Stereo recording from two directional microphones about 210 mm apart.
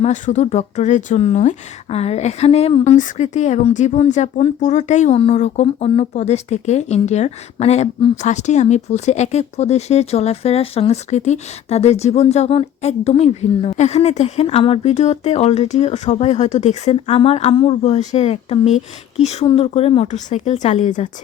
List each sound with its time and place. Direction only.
0.0 s a woman's voice: 35° left (ahead or behind)